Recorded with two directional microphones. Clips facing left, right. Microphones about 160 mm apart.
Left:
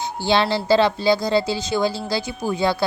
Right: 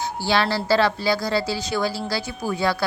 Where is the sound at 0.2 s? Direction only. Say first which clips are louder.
Left 3 dB; 20° left (ahead or behind).